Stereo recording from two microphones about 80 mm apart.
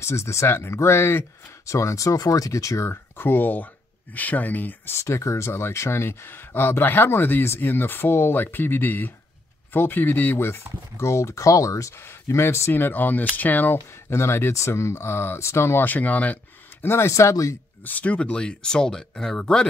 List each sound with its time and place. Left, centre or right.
0.0 s speech: left
4.9 s speech: left
13.7 s speech: left
15.8 s speech: left
16.8 s speech: left
17.8 s speech: centre